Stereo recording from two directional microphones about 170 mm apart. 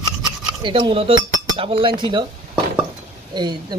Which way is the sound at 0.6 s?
30° right (ahead or behind).